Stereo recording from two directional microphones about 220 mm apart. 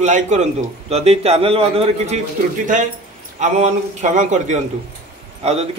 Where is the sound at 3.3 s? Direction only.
35° right (ahead or behind).